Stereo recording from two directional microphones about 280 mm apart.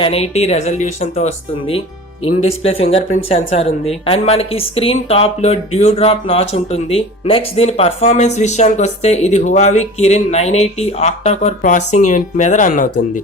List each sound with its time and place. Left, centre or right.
0.0 s speech: left
2.4 s speech: left